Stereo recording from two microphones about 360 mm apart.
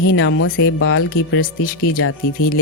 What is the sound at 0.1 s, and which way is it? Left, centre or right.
Speech, left.